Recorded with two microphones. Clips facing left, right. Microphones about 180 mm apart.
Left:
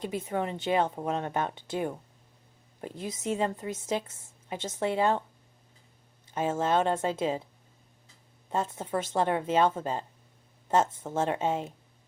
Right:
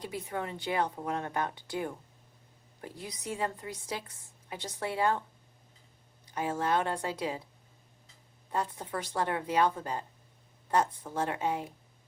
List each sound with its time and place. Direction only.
0.0 s a woman's voice: 20° left (ahead or behind)
6.2 s a woman's voice: 25° left (ahead or behind)
8.4 s a woman's voice: 20° left (ahead or behind)